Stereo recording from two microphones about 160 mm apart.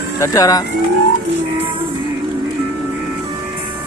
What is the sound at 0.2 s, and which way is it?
Speech, 20° left (ahead or behind).